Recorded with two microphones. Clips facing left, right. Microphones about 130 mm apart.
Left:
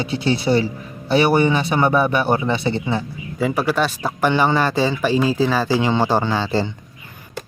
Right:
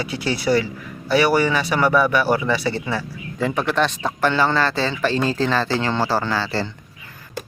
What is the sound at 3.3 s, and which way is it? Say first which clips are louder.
Speech: left 1 dB; 5° left (ahead or behind).